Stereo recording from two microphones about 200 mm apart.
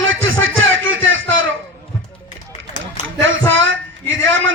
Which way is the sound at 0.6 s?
75° right (ahead or behind).